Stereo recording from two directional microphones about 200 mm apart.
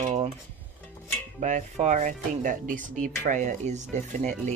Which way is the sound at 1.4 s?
40° right (ahead or behind).